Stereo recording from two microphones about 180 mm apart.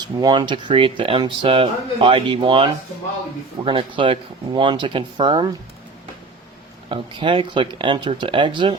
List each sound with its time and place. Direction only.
0.0 s speech: 25° right (ahead or behind)
6.9 s speech: 25° right (ahead or behind)